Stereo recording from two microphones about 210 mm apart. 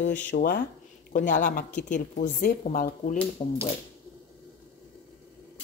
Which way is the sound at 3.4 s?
30° left (ahead or behind).